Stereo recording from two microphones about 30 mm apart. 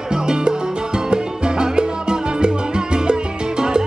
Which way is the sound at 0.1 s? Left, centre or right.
Right.